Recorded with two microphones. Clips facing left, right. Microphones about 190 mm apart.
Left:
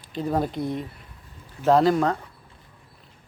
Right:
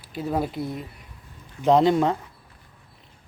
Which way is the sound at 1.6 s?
20° right (ahead or behind).